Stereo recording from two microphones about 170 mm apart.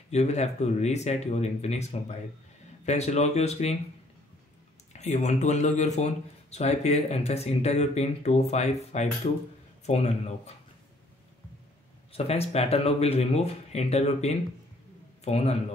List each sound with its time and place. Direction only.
0.1 s speech: 40° left (ahead or behind)
4.9 s speech: 45° left (ahead or behind)
12.1 s speech: 35° left (ahead or behind)